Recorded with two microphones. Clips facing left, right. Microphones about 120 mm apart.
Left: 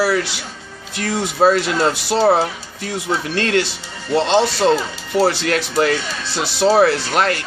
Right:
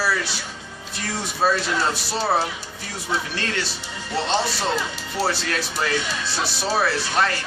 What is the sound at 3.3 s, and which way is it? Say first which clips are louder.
Speech: left 9 dB; 75° left (ahead or behind).